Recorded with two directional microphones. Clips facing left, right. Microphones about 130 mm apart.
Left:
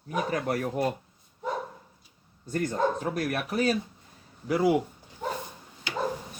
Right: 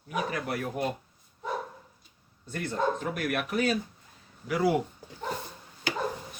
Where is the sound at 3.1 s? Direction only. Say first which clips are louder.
Left 1 dB; 35° left (ahead or behind).